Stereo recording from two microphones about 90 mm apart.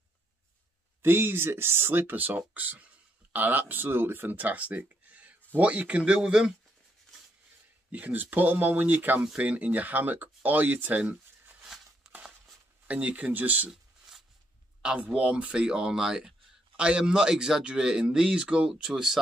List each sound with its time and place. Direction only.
1.0 s speech: 25° right (ahead or behind)
7.9 s speech: 20° right (ahead or behind)
11.6 s a sound: 5° right (ahead or behind)
12.8 s speech: 15° right (ahead or behind)
13.7 s a sound: 5° right (ahead or behind)
14.8 s speech: 10° right (ahead or behind)